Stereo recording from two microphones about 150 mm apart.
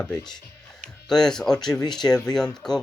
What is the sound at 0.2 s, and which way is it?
Speech, 30° left (ahead or behind).